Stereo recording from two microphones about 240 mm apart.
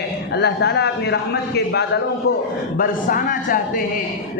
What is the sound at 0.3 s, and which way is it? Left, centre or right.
A man's voice, left.